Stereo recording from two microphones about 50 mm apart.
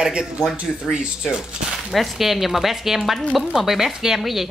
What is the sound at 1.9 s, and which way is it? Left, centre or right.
Speech, centre.